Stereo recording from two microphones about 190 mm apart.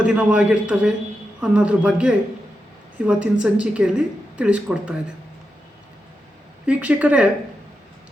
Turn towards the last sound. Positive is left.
turn(degrees=-5)  # may be behind; listen again after turning